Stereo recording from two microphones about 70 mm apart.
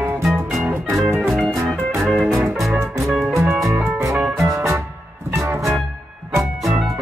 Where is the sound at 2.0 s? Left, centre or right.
Centre.